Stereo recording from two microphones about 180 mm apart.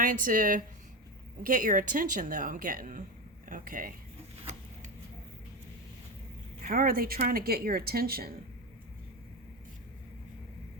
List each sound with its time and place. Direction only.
0.0 s a woman's voice: 50° right (ahead or behind)
4.4 s vehicle: 35° right (ahead or behind)
6.6 s a woman's voice: 55° right (ahead or behind)